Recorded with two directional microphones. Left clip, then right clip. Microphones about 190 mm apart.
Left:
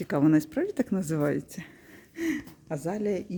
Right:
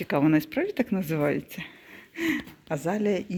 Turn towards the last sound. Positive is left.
turn(degrees=10)  # may be behind; listen again after turning